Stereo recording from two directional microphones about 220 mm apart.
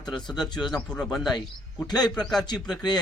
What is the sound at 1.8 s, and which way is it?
Speech, 20° left (ahead or behind).